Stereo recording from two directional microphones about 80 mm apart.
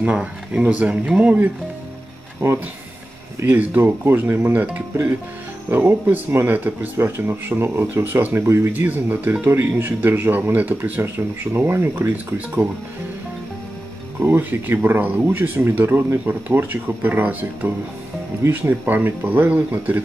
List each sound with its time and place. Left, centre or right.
0.0 s speech: centre
3.3 s speech: right
14.2 s speech: right